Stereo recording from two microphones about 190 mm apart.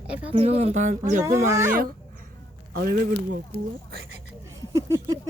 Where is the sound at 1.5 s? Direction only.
15° right (ahead or behind).